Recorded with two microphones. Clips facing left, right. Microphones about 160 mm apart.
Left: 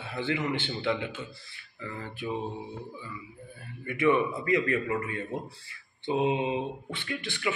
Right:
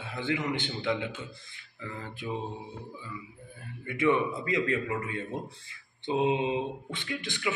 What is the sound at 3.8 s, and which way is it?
Speech, 15° right (ahead or behind).